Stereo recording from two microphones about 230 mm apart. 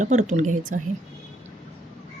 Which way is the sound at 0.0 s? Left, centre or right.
Right.